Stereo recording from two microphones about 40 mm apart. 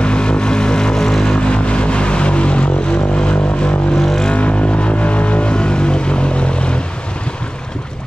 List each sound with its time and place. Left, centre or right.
0.0 s vehicle: left
4.0 s vehicle: centre
4.3 s vehicle: left